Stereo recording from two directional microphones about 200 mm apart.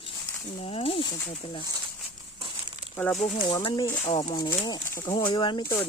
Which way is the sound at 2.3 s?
25° right (ahead or behind).